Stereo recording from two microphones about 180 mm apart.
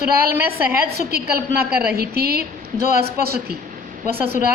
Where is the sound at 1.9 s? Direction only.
55° right (ahead or behind).